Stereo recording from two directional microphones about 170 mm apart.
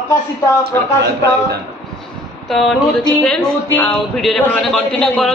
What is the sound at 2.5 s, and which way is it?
A man's voice, centre (ahead or behind).